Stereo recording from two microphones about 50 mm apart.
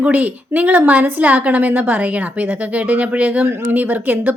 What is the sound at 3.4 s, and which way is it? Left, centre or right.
Speech, right.